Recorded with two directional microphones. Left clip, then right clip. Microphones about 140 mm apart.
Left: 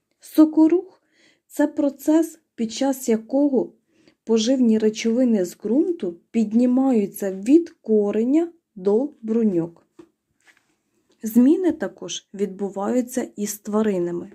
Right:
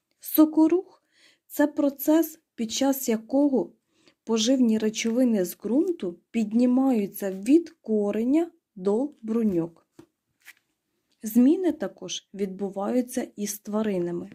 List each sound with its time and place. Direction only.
0.2 s speech: 25° right (ahead or behind)
11.1 s speech: 20° right (ahead or behind)